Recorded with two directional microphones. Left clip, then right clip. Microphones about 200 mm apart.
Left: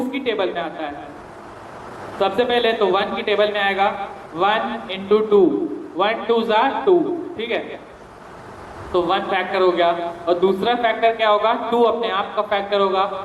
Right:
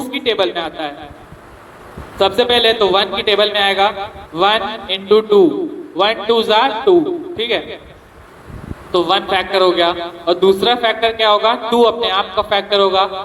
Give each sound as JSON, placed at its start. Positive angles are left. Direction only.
{"t": 0.1, "sound": "a man's voice", "side_deg": -55}
{"t": 2.1, "sound": "a man's voice", "side_deg": -55}
{"t": 8.9, "sound": "a man's voice", "side_deg": -55}